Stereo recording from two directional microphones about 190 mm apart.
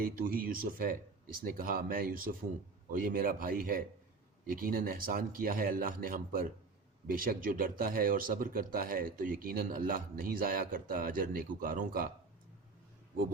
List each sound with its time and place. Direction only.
0.0 s speech: 50° right (ahead or behind)